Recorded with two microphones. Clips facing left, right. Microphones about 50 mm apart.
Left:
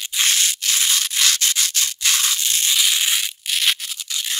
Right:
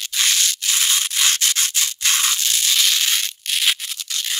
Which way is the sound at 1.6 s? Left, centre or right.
Right.